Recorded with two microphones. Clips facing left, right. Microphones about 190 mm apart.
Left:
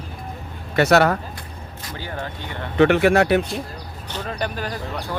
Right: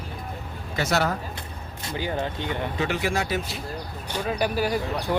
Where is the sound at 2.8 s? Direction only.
65° left (ahead or behind).